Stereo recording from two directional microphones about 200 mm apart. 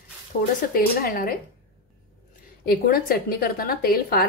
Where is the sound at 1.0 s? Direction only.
45° left (ahead or behind).